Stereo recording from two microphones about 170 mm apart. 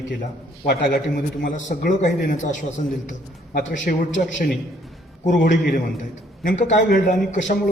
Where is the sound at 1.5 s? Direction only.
50° left (ahead or behind).